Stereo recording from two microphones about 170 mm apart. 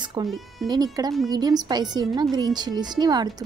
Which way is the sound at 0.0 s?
25° right (ahead or behind).